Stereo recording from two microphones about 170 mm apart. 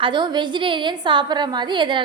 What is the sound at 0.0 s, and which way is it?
A woman's voice, 25° right (ahead or behind).